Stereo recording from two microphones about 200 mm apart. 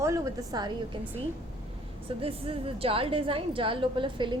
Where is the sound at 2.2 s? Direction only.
30° right (ahead or behind).